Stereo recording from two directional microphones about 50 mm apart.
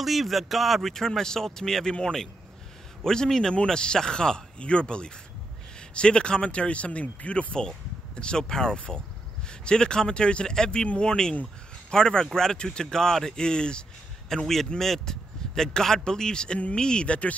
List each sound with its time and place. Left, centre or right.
0.0 s speech: centre
3.0 s a man's voice: centre
14.3 s a man's voice: centre; by 17.3 s left